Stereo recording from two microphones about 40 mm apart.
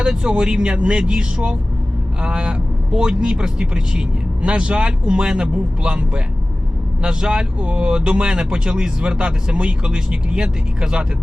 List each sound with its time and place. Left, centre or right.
0.0 s speech: right